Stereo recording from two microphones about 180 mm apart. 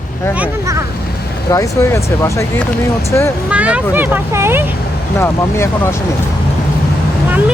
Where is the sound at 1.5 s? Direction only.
20° left (ahead or behind).